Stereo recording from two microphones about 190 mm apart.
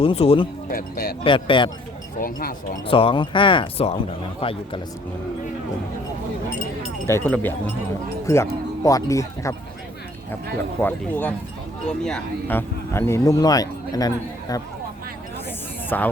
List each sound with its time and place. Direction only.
0.0 s speech: 30° left (ahead or behind)
0.7 s speech: 50° left (ahead or behind)
1.2 s speech: 25° left (ahead or behind)
2.1 s speech: 50° left (ahead or behind)
2.8 s speech: 30° left (ahead or behind)
7.1 s speech: 10° left (ahead or behind)
10.8 s speech: 10° left (ahead or behind)
15.9 s speech: 10° left (ahead or behind)